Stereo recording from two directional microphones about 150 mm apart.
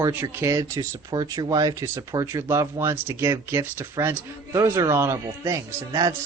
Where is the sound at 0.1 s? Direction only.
15° right (ahead or behind).